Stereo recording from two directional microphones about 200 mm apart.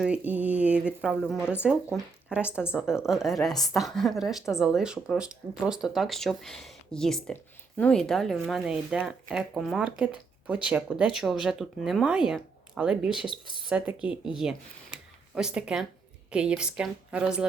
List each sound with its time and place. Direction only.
0.0 s speech: 5° right (ahead or behind)
2.7 s speech: 5° right (ahead or behind)
13.2 s speech: 25° left (ahead or behind)
13.7 s speech: 5° right (ahead or behind)